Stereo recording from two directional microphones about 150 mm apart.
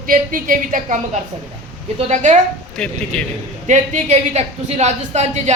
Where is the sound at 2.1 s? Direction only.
55° right (ahead or behind).